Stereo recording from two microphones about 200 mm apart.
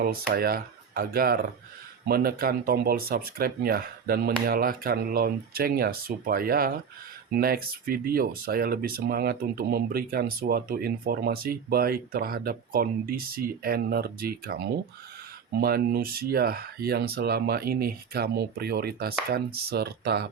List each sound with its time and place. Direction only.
0.0 s speech: 50° right (ahead or behind)